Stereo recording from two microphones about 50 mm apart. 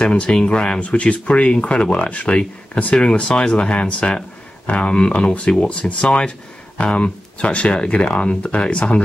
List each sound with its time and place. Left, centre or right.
0.0 s speech: centre